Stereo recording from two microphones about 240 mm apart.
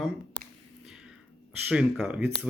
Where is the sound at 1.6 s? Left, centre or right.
Centre.